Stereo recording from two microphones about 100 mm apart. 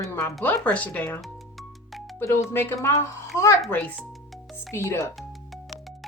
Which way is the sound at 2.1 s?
25° left (ahead or behind).